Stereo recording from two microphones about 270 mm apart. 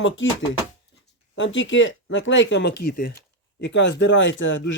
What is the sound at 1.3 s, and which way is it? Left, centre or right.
Speech, left.